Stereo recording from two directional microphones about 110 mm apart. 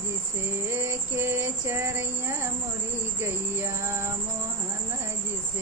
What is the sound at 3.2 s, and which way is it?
Music, 20° right (ahead or behind).